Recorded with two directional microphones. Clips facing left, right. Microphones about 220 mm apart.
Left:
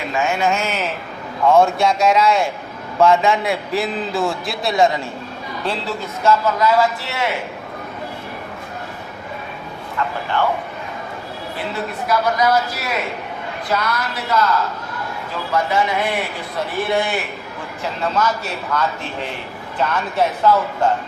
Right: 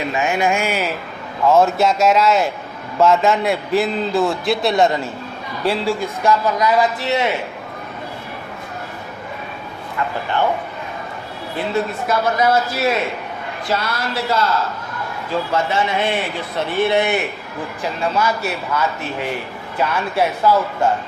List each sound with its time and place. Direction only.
0.1 s a man's voice: 15° right (ahead or behind); by 4.9 s centre (ahead or behind)
5.6 s a man's voice: 10° right (ahead or behind)
12.0 s speech: 25° right (ahead or behind)
15.5 s speech: 25° right (ahead or behind)
18.2 s a man's voice: 10° right (ahead or behind)